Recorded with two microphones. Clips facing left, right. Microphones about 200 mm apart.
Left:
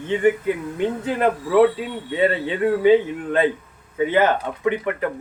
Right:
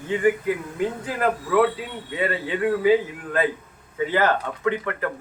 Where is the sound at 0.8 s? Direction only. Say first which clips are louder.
Left 4 dB; 25° left (ahead or behind).